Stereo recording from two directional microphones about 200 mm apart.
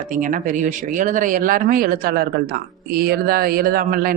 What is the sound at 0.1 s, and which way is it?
Speech, 40° right (ahead or behind).